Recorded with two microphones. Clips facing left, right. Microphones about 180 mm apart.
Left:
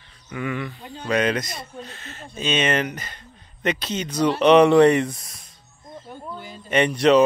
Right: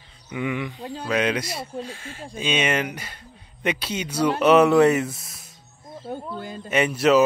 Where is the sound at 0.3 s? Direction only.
15° right (ahead or behind).